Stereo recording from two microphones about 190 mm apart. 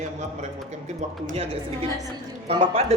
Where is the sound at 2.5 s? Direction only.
30° right (ahead or behind).